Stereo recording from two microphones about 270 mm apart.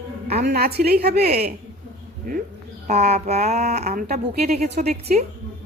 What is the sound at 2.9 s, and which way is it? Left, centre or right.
Speech, right.